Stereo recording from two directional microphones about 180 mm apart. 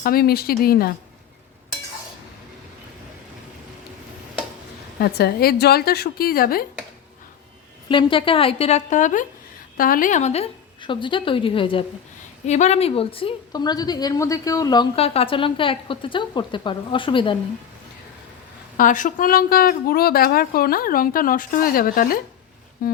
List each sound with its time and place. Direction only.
0.0 s a woman's voice: 55° left (ahead or behind)
4.9 s a woman's voice: 60° left (ahead or behind)
7.9 s a woman's voice: 30° left (ahead or behind)
14.9 s a woman's voice: 35° left (ahead or behind)
18.8 s a woman's voice: 45° left (ahead or behind)